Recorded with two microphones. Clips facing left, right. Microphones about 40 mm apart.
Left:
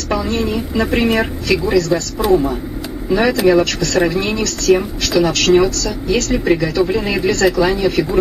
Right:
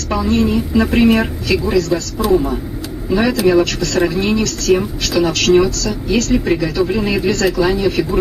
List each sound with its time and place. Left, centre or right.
0.1 s speech: centre
2.1 s speech: centre